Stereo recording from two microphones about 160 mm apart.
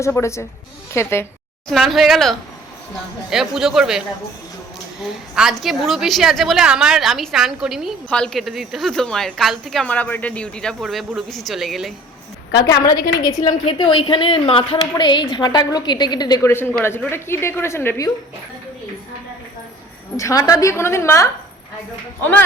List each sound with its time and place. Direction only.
0.0 s speech: 15° left (ahead or behind)
1.7 s a woman's voice: centre (ahead or behind)
12.5 s a woman's voice: 25° left (ahead or behind)
20.1 s a woman's voice: 20° left (ahead or behind)